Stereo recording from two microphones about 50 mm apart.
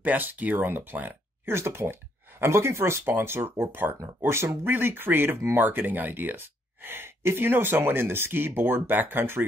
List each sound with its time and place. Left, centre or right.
0.0 s speech: right
1.4 s speech: right
2.5 s speech: right
3.3 s speech: right